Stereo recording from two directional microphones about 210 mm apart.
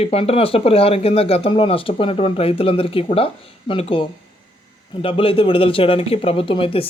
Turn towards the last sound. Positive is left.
turn(degrees=25)  # may be behind; listen again after turning